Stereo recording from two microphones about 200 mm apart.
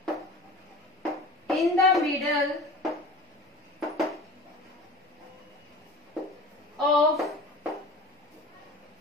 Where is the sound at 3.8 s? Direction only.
Centre (ahead or behind).